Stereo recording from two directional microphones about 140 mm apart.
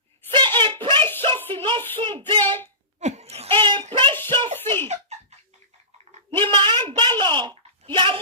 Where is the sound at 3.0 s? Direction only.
50° right (ahead or behind); by 4.1 s 35° right (ahead or behind).